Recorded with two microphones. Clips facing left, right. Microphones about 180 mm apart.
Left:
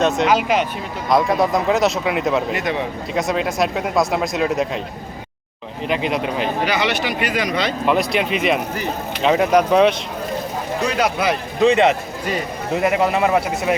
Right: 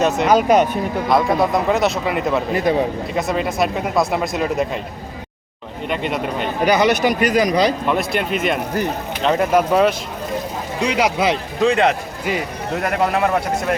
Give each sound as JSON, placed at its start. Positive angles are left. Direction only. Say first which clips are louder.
{"t": 0.3, "sound": "speech", "louder": "right 4 dB", "side_deg": -45}
{"t": 1.1, "sound": "speech", "louder": "left 1 dB", "side_deg": 0}
{"t": 2.6, "sound": "speech", "louder": "right 5 dB", "side_deg": -35}
{"t": 3.2, "sound": "speech", "louder": "left 1 dB", "side_deg": 0}
{"t": 5.9, "sound": "speech", "louder": "left 1 dB", "side_deg": 0}
{"t": 6.7, "sound": "speech", "louder": "right 6 dB", "side_deg": -40}
{"t": 7.9, "sound": "speech", "louder": "left 2 dB", "side_deg": 0}
{"t": 10.8, "sound": "speech", "louder": "right 2 dB", "side_deg": -20}
{"t": 11.6, "sound": "a man's voice", "louder": "left 2 dB", "side_deg": 0}